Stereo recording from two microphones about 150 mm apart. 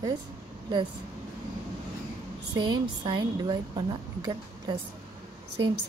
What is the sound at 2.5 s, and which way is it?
A woman's voice, 30° right (ahead or behind).